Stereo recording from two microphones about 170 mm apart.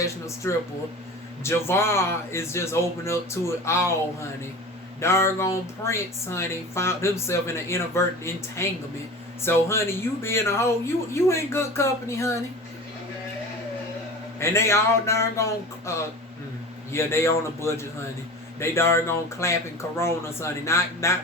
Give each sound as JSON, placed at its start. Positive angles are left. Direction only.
{"t": 0.0, "sound": "speech", "side_deg": 15}
{"t": 14.3, "sound": "speech", "side_deg": 15}
{"t": 16.9, "sound": "speech", "side_deg": 15}